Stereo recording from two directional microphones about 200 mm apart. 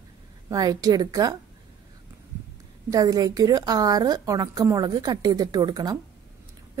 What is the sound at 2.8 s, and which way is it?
A woman's voice, 20° right (ahead or behind).